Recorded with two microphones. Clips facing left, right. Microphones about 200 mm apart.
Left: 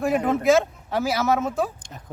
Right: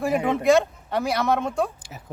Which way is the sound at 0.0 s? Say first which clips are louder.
Left 1 dB; centre (ahead or behind).